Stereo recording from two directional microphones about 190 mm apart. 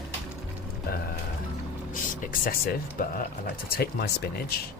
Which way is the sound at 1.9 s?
45° left (ahead or behind).